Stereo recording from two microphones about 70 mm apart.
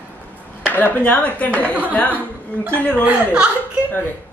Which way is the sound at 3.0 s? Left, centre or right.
Centre.